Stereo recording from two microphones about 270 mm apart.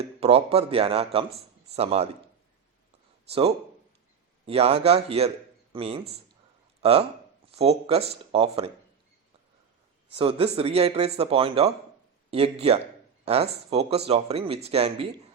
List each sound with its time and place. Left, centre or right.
0.0 s speech: right
3.2 s speech: right
7.5 s speech: right
10.1 s speech: right